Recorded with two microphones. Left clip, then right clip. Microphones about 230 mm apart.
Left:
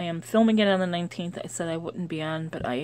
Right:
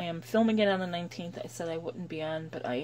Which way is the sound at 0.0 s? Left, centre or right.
Left.